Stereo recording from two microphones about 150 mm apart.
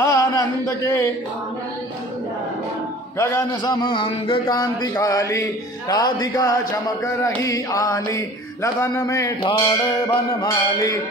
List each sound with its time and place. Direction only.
0.0 s a sound: 25° left (ahead or behind)
3.2 s a man's voice: 20° left (ahead or behind)
3.7 s mantra: 30° left (ahead or behind)